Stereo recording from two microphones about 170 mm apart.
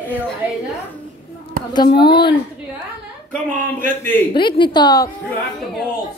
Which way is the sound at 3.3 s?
10° left (ahead or behind).